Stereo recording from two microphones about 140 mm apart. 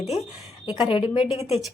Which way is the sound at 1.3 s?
50° left (ahead or behind).